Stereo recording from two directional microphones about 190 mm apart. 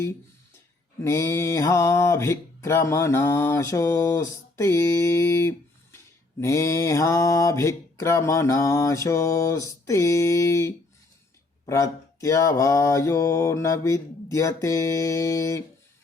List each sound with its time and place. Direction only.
1.0 s speech: 15° left (ahead or behind)